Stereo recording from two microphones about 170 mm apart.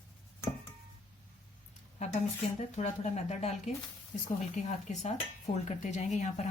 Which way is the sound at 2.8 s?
40° left (ahead or behind).